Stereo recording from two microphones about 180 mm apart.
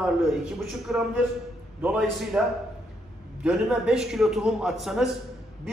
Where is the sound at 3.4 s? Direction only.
5° right (ahead or behind).